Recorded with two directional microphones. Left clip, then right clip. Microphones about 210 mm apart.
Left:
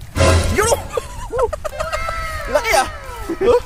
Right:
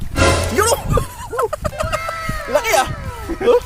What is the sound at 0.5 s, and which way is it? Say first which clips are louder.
Bow-wow: right 1 dB; 15° right (ahead or behind).